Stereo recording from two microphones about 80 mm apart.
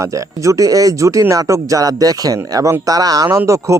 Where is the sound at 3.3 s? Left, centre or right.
Right.